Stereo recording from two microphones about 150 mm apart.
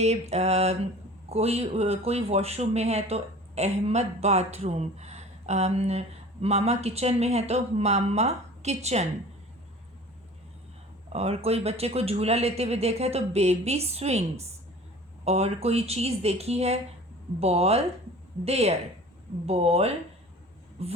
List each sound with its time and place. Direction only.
0.0 s speech: 45° right (ahead or behind)
11.1 s speech: 45° right (ahead or behind)